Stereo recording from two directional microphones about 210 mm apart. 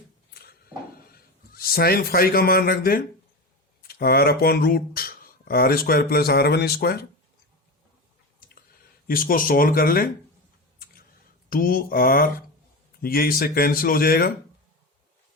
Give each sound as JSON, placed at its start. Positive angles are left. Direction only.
{"t": 0.9, "sound": "a sound", "side_deg": 45}
{"t": 3.8, "sound": "speech", "side_deg": 45}
{"t": 9.0, "sound": "speech", "side_deg": 40}
{"t": 11.4, "sound": "speech", "side_deg": 45}